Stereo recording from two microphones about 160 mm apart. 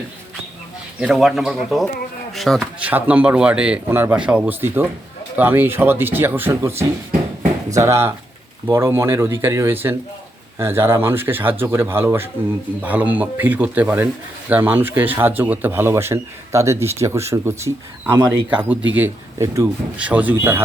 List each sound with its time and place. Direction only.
0.9 s a man's voice: centre (ahead or behind)